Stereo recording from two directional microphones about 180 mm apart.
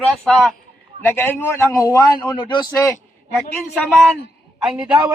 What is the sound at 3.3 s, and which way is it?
A man's voice, centre (ahead or behind).